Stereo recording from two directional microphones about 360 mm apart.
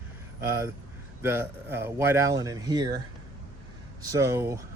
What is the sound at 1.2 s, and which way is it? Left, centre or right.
Speech, centre.